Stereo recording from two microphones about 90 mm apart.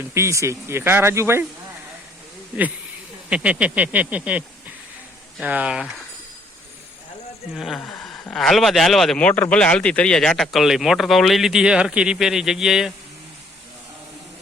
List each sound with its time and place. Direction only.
0.0 s speech: 30° right (ahead or behind)
3.2 s speech: 15° right (ahead or behind)
7.5 s speech: centre (ahead or behind)
7.8 s a sound: 10° left (ahead or behind)
8.3 s speech: 5° left (ahead or behind)
9.2 s speech: 15° left (ahead or behind); by 12.9 s 5° right (ahead or behind)